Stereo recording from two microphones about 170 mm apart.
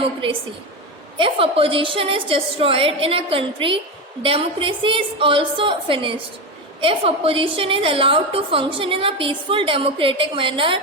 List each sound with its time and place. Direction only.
0.2 s a woman's voice: 30° right (ahead or behind)